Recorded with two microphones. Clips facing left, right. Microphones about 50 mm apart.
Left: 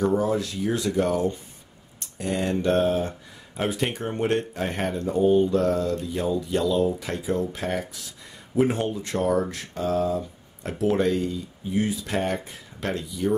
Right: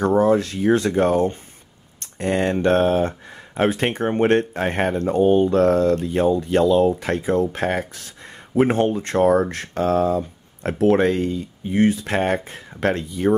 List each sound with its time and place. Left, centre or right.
0.0 s speech: right